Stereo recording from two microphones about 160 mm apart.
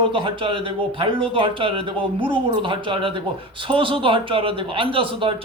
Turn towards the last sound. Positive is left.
turn(degrees=-30)  # may be behind; listen again after turning